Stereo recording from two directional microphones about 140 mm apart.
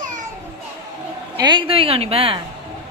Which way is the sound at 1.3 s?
30° right (ahead or behind).